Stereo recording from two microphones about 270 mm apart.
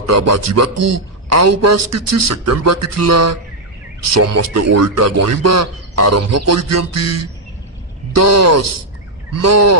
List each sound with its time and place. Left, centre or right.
0.0 s a man's voice: right